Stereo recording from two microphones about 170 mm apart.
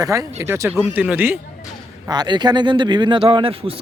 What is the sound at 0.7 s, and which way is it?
Speech, 5° right (ahead or behind).